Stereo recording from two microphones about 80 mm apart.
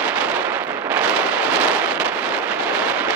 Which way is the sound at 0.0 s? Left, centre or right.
Centre.